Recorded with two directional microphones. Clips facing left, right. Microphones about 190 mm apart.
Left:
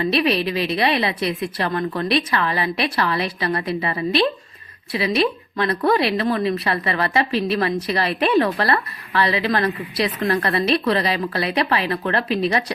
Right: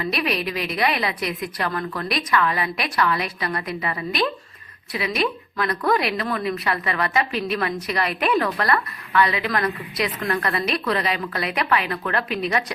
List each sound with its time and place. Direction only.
0.0 s a woman's voice: 30° left (ahead or behind)